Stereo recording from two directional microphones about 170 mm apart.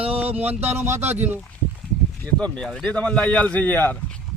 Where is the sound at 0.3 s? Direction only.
35° right (ahead or behind).